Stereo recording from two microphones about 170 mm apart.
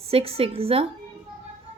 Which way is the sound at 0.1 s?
35° right (ahead or behind).